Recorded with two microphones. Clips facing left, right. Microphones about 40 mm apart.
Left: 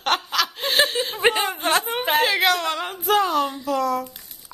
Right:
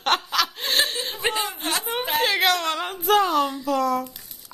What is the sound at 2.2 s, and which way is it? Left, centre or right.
Speech, centre.